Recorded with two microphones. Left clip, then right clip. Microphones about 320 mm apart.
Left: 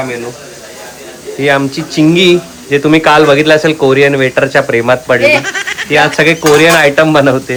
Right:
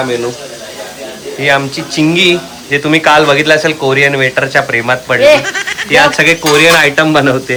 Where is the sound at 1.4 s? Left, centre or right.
Centre.